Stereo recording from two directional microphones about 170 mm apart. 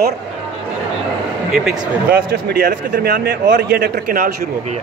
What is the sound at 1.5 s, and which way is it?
Speech, 5° right (ahead or behind).